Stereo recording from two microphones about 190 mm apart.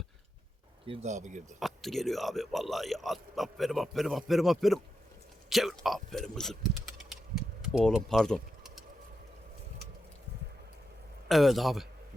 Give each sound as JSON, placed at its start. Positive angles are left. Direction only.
{"t": 0.9, "sound": "speech", "side_deg": -40}
{"t": 1.5, "sound": "speech", "side_deg": 0}
{"t": 11.3, "sound": "speech", "side_deg": 0}